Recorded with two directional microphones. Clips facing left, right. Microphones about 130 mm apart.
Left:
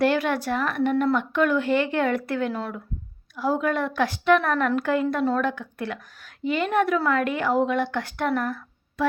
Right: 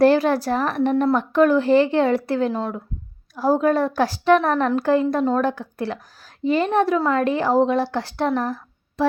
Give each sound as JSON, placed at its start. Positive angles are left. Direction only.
{"t": 0.0, "sound": "a woman's voice", "side_deg": -35}
{"t": 3.3, "sound": "a woman's voice", "side_deg": -40}